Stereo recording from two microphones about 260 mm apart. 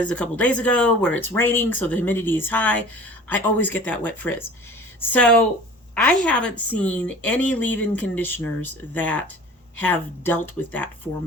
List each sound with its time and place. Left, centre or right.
0.0 s a woman's voice: centre